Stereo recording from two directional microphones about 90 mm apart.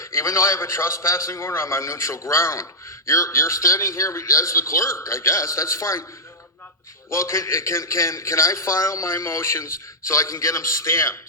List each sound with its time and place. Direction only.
0.0 s a man's voice: 30° left (ahead or behind)
7.1 s a man's voice: 30° left (ahead or behind)